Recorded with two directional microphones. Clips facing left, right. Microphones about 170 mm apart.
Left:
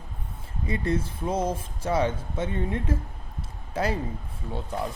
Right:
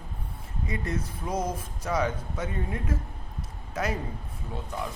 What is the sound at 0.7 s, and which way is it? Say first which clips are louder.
Speech: left 6 dB; 30° left (ahead or behind).